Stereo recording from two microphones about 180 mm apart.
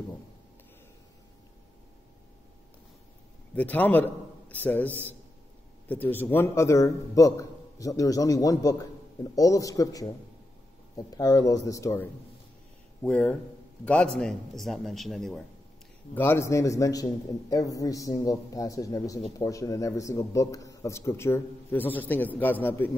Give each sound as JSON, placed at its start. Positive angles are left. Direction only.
{"t": 3.5, "sound": "a man's voice", "side_deg": 10}
{"t": 16.2, "sound": "a man's voice", "side_deg": 15}